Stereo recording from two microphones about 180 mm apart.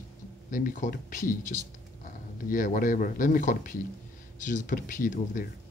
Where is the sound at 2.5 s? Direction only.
45° left (ahead or behind).